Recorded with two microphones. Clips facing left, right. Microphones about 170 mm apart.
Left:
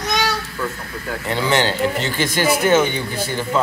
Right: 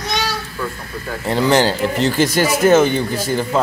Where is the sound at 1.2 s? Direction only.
40° right (ahead or behind).